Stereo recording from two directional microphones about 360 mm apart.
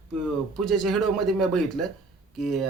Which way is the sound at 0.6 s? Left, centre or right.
Centre.